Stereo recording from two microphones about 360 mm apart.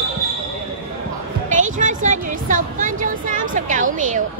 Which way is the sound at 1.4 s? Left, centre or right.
Right.